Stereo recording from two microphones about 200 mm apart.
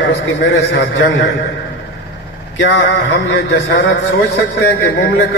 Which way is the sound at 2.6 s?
60° left (ahead or behind).